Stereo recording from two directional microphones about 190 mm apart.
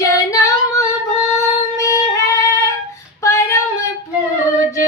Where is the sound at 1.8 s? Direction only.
15° left (ahead or behind).